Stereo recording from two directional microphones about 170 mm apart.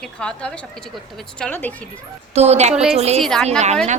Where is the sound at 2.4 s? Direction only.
40° right (ahead or behind).